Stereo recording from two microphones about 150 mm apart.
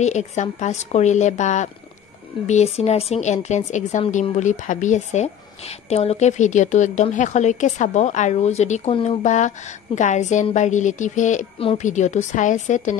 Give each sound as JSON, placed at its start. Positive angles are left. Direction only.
{"t": 0.0, "sound": "a woman's voice", "side_deg": 50}
{"t": 8.9, "sound": "speech", "side_deg": 35}
{"t": 9.2, "sound": "a woman's voice", "side_deg": 55}